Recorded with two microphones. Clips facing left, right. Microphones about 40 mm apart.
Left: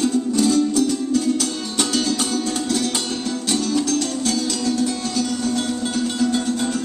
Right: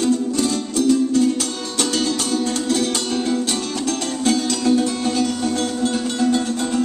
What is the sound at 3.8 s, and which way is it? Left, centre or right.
Music, right.